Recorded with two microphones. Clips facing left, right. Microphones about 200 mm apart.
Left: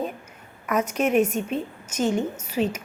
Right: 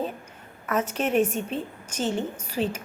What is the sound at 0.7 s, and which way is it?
A woman's voice, 10° left (ahead or behind).